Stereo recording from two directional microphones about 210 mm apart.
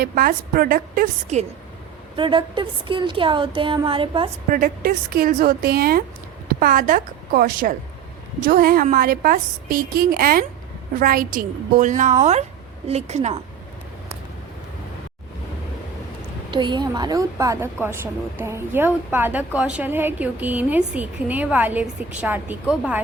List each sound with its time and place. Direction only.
0.0 s a woman's voice: 45° right (ahead or behind)
2.1 s speech: 25° right (ahead or behind)
4.4 s a woman's voice: 40° right (ahead or behind)
16.5 s a woman's voice: 20° right (ahead or behind); by 23.0 s 5° right (ahead or behind)